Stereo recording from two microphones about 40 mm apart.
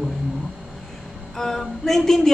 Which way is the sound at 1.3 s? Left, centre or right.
Centre.